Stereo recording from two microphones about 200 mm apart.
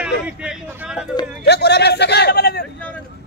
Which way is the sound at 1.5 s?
55° left (ahead or behind).